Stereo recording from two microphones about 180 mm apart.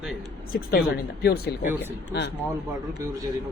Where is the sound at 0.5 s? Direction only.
55° left (ahead or behind).